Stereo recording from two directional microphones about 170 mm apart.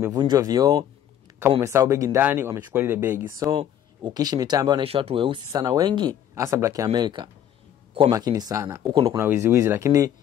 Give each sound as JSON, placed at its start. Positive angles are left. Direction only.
{"t": 0.0, "sound": "speech", "side_deg": -20}